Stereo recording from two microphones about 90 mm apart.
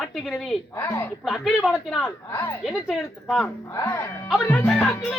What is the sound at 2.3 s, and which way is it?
Speech, 25° left (ahead or behind).